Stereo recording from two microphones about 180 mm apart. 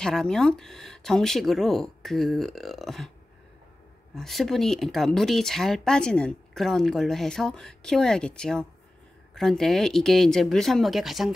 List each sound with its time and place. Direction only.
0.0 s speech: 5° left (ahead or behind)
4.1 s speech: centre (ahead or behind)